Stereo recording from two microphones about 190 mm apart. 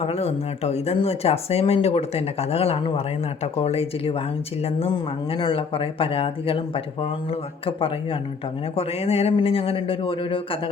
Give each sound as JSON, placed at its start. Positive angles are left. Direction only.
{"t": 0.0, "sound": "speech", "side_deg": 30}